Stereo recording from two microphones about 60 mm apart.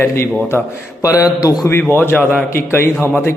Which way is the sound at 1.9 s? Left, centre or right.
Left.